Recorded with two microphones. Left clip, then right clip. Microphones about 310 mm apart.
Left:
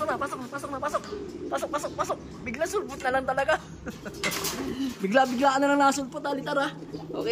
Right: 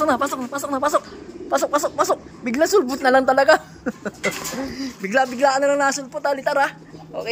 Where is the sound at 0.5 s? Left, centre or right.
Right.